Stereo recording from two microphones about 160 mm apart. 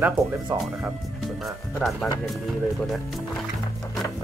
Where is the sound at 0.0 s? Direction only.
15° right (ahead or behind).